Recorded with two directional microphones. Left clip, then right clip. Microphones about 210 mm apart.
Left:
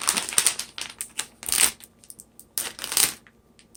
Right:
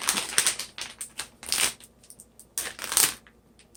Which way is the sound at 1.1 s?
35° left (ahead or behind).